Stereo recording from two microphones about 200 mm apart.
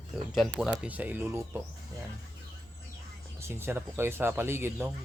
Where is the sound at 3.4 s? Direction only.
10° right (ahead or behind).